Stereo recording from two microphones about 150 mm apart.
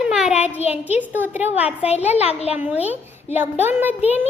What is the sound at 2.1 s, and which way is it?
Speech, 45° left (ahead or behind).